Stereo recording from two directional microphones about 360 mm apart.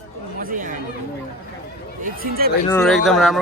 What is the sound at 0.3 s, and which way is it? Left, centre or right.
Speech, right.